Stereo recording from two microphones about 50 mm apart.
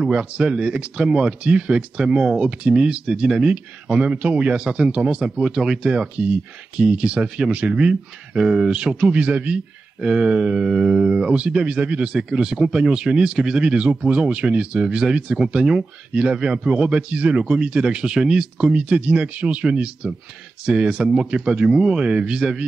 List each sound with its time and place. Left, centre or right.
0.1 s speech: centre
18.9 s speech: right